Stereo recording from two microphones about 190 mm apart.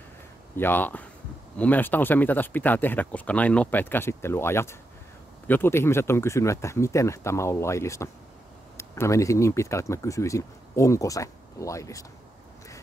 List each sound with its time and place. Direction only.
0.6 s speech: 10° left (ahead or behind)